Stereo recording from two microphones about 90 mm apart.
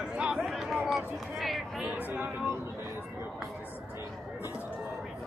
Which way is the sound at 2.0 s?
20° right (ahead or behind).